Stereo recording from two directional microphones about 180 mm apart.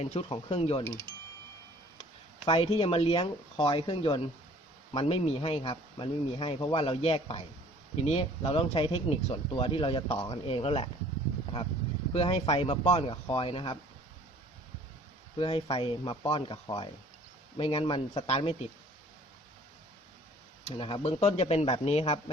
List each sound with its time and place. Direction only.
0.0 s speech: 35° left (ahead or behind)
0.9 s speech: 15° left (ahead or behind)
2.0 s speech: 30° left (ahead or behind)
12.1 s speech: 30° left (ahead or behind)
15.4 s speech: 30° left (ahead or behind)
20.7 s speech: 30° left (ahead or behind)